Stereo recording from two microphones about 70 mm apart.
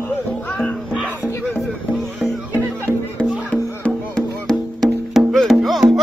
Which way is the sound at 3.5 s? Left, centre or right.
Centre.